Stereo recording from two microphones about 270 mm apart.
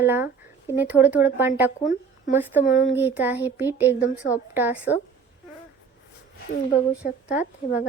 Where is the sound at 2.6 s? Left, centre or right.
Left.